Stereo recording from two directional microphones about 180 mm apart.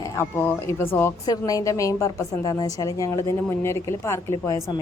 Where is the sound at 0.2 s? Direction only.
15° left (ahead or behind).